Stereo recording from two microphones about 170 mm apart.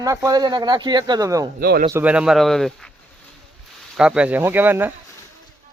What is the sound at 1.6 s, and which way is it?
Speech, 65° right (ahead or behind).